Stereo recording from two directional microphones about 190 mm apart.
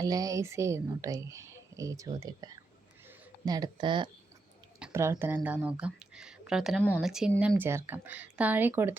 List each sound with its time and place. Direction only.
0.0 s a woman's voice: 20° right (ahead or behind)
4.8 s speech: 15° right (ahead or behind)
6.8 s speech: 10° left (ahead or behind)
7.1 s a woman's voice: 5° right (ahead or behind)